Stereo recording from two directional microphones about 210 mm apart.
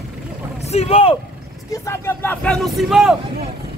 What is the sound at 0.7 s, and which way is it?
Speech, 25° left (ahead or behind).